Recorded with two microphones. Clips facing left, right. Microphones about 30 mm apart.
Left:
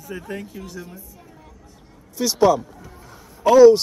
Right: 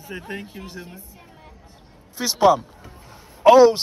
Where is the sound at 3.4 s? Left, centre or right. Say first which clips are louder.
Left 1 dB; right.